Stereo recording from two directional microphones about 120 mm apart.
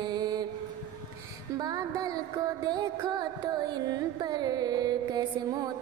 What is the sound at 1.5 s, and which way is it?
Music, 30° right (ahead or behind).